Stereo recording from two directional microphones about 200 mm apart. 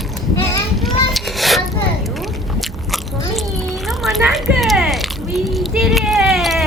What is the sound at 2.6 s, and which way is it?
Biting, centre (ahead or behind).